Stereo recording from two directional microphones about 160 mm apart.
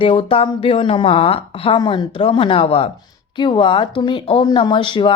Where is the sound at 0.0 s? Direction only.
35° left (ahead or behind).